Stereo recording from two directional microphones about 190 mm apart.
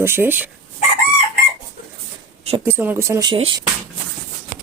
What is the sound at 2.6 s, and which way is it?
Speech, 10° right (ahead or behind).